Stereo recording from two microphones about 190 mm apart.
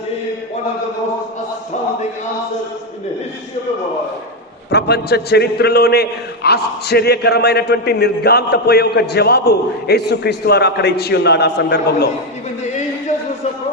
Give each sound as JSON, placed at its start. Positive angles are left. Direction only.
{"t": 4.7, "sound": "a man's voice", "side_deg": 60}